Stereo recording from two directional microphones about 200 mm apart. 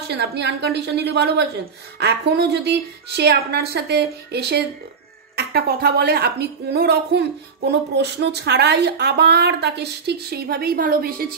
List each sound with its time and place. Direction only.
0.1 s a woman's voice: 55° right (ahead or behind)